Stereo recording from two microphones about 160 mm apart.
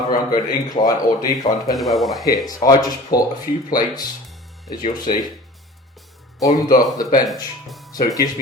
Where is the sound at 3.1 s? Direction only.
70° left (ahead or behind).